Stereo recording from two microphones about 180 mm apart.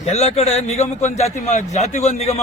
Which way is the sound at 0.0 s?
35° left (ahead or behind).